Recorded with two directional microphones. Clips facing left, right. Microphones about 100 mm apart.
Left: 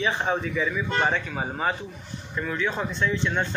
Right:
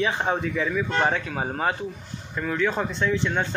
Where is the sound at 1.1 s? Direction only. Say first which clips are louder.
Right 1 dB; 55° right (ahead or behind).